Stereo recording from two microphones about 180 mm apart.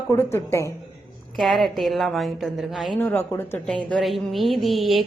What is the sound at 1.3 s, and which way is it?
A woman's voice, centre (ahead or behind).